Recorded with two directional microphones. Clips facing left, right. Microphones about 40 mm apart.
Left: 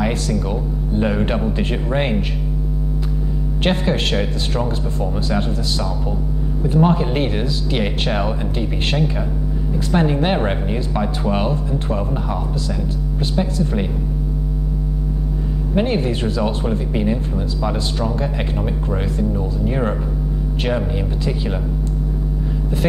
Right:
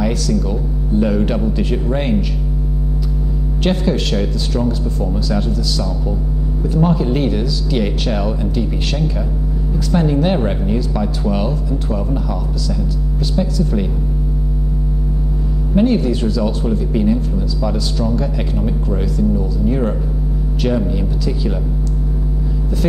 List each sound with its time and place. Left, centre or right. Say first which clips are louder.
0.0 s speech: right 2 dB; left
3.6 s speech: right 1 dB; left
13.4 s speech: right 2 dB; left
15.7 s speech: right 4 dB; left